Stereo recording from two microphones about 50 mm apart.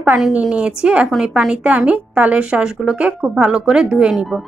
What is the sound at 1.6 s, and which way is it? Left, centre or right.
A woman's voice, right.